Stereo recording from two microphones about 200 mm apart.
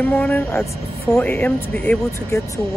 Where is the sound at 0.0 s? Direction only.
10° left (ahead or behind).